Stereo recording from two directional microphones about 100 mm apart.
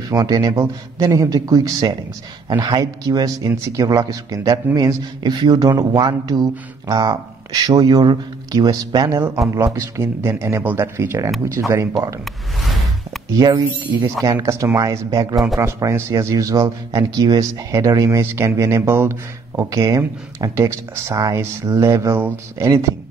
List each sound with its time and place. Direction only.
0.1 s speech: 35° right (ahead or behind)
13.3 s speech: 40° right (ahead or behind)
14.2 s speech: 30° right (ahead or behind)
15.3 s speech: centre (ahead or behind)
15.6 s speech: 30° right (ahead or behind)